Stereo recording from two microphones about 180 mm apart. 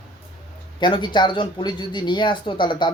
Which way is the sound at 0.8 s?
25° left (ahead or behind).